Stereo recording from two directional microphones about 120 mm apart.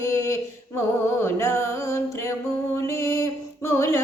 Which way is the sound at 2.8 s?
25° left (ahead or behind).